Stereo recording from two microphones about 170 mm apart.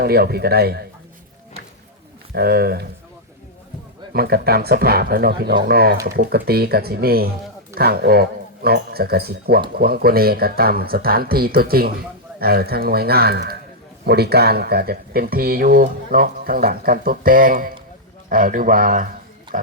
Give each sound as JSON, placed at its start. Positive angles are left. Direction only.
{"t": 0.0, "sound": "speech", "side_deg": -65}
{"t": 2.3, "sound": "speech", "side_deg": -65}
{"t": 4.1, "sound": "speech", "side_deg": -65}